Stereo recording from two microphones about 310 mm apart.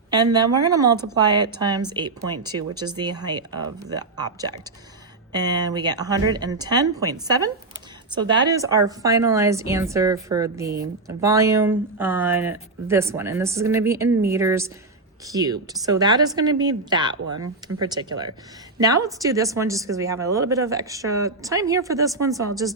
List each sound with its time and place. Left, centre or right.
0.1 s speech: centre
17.4 s speech: right
17.8 s speech: centre